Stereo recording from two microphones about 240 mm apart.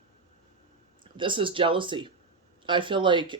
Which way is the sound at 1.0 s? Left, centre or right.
Centre.